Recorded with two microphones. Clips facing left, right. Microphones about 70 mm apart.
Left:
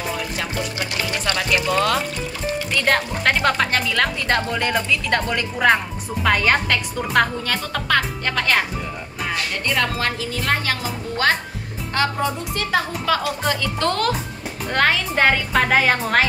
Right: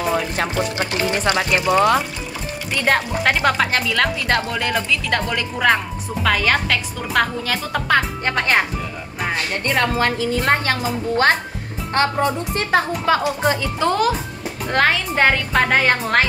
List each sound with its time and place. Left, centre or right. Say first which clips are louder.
0.1 s a woman's voice: right 5 dB; right
1.7 s speech: right 7 dB; centre
7.9 s a woman's voice: right 2 dB; right
11.9 s a woman's voice: right 3 dB; right
13.7 s speech: right 3 dB; centre